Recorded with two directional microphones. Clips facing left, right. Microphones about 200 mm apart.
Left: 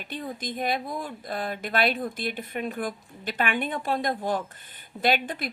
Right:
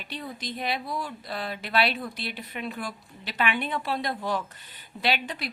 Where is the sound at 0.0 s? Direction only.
45° left (ahead or behind).